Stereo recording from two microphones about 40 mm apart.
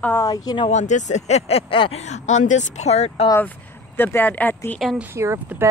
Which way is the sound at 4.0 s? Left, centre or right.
Left.